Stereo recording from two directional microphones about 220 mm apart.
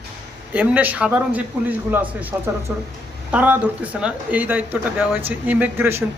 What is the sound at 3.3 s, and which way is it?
Speech, 5° right (ahead or behind).